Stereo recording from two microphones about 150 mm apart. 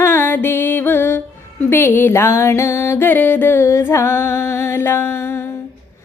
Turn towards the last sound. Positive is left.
turn(degrees=15)  # may be behind; listen again after turning